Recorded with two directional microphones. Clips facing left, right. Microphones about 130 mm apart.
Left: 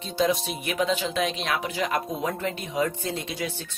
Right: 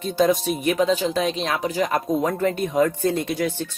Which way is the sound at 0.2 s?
45° right (ahead or behind).